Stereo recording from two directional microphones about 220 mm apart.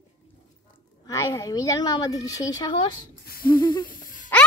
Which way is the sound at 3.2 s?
40° left (ahead or behind).